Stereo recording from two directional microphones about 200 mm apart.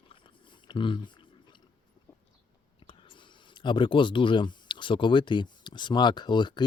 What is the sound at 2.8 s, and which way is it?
Speech, 25° left (ahead or behind).